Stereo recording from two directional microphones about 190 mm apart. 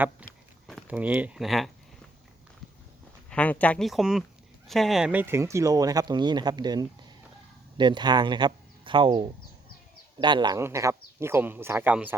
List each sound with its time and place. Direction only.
0.7 s speech: 5° right (ahead or behind)
3.2 s speech: 5° left (ahead or behind); by 12.1 s 10° right (ahead or behind)